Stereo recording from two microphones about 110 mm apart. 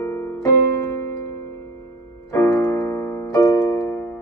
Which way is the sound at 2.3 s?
25° left (ahead or behind).